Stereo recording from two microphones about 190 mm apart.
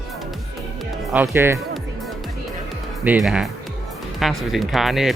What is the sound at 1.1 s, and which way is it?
Speech, 10° right (ahead or behind).